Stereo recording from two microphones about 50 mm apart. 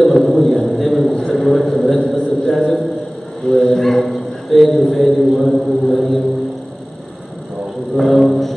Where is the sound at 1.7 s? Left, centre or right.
Centre.